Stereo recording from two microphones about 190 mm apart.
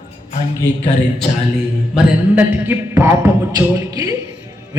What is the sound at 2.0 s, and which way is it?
A man's voice, 10° right (ahead or behind).